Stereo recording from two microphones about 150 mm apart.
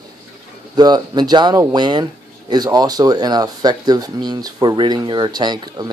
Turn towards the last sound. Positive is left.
turn(degrees=-30)  # may be behind; listen again after turning